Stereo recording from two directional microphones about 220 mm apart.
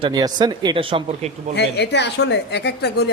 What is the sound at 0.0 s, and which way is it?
Speech, 20° right (ahead or behind).